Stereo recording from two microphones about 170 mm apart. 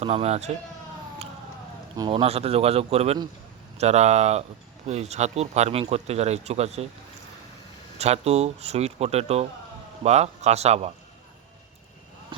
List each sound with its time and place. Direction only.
0.0 s speech: 35° right (ahead or behind)
2.0 s speech: 30° right (ahead or behind)
7.9 s speech: 40° right (ahead or behind)